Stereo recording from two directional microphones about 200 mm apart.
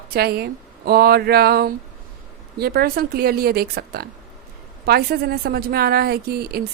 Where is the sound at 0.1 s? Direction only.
50° right (ahead or behind).